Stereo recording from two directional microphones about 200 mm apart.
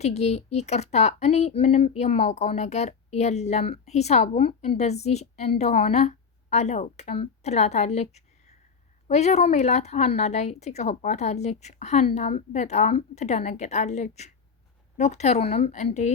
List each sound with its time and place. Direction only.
0.0 s speech: 35° left (ahead or behind)